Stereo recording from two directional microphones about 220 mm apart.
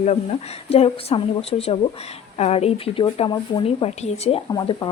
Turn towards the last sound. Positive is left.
turn(degrees=20)  # may be behind; listen again after turning